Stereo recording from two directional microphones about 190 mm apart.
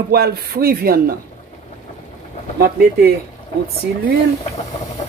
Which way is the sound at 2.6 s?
55° right (ahead or behind).